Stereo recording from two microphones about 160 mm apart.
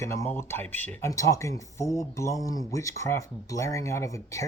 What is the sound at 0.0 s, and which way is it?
Speech, 15° left (ahead or behind).